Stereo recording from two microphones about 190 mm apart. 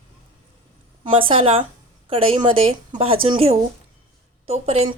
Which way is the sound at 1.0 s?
30° right (ahead or behind).